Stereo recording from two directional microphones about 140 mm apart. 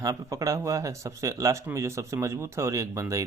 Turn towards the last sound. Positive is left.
turn(degrees=-20)  # may be behind; listen again after turning